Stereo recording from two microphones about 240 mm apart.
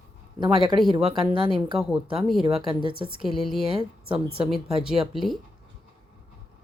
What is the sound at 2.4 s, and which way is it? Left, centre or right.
Speech, right.